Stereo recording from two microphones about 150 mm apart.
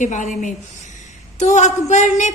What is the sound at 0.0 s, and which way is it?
A woman's voice, 55° left (ahead or behind).